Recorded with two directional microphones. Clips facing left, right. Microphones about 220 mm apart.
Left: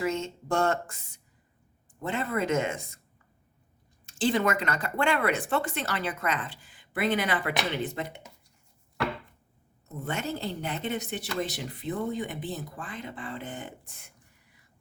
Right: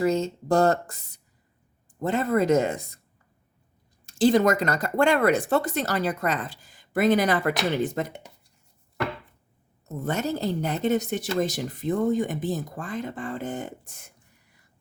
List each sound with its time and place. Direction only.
0.0 s speech: 35° right (ahead or behind)
4.0 s speech: 40° right (ahead or behind)
10.0 s speech: 40° right (ahead or behind)